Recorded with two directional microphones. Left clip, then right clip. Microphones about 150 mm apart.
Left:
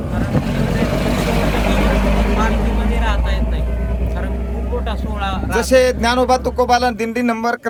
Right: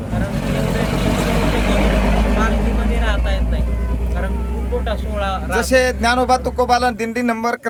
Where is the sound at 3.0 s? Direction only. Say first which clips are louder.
Even; 10° left (ahead or behind).